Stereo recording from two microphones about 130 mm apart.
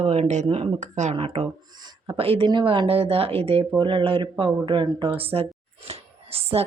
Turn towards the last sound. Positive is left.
turn(degrees=-50)  # may be behind; listen again after turning